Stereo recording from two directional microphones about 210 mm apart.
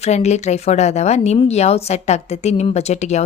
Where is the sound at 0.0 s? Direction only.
30° left (ahead or behind).